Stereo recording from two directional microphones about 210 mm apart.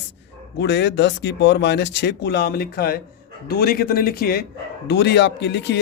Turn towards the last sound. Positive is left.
turn(degrees=55)  # may be behind; listen again after turning